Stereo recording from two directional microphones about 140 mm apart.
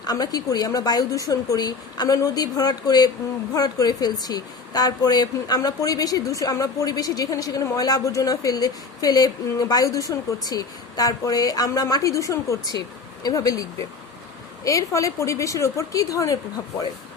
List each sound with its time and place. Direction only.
0.0 s speech: 30° left (ahead or behind)